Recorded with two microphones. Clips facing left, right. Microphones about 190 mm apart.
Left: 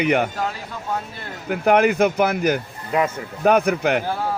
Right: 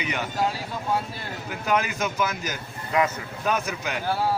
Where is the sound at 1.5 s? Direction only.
60° left (ahead or behind).